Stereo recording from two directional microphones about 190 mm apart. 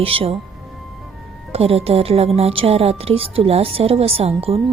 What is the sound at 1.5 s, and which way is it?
A woman's voice, 30° right (ahead or behind).